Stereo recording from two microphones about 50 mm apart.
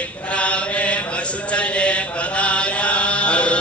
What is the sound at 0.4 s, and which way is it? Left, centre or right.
Chant, left.